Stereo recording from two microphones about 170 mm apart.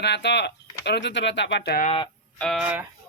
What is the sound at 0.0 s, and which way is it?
Speech, 85° left.